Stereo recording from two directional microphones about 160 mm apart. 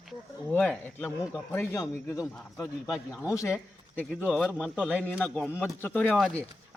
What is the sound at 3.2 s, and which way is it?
Speech, 20° left (ahead or behind).